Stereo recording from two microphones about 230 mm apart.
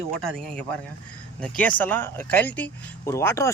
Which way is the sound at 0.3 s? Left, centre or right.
Centre.